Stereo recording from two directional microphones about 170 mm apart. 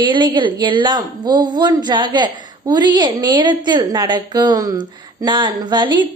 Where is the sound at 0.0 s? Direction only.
30° right (ahead or behind).